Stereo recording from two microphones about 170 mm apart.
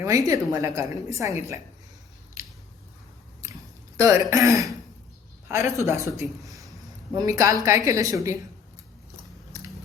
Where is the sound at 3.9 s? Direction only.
20° right (ahead or behind).